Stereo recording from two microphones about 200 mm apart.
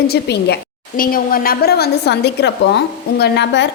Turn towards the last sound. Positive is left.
turn(degrees=60)  # may be behind; listen again after turning